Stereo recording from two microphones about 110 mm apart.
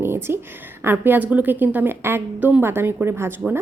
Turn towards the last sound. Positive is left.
turn(degrees=-20)  # may be behind; listen again after turning